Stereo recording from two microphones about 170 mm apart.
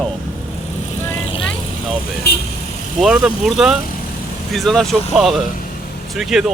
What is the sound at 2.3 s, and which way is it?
Vehicle, 70° left (ahead or behind).